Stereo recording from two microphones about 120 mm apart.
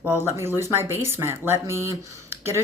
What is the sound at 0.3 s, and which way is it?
Speech, 20° right (ahead or behind).